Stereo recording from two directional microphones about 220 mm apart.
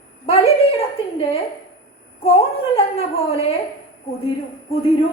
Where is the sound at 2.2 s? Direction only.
25° left (ahead or behind).